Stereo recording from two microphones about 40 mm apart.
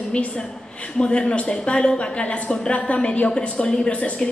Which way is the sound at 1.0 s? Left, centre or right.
Left.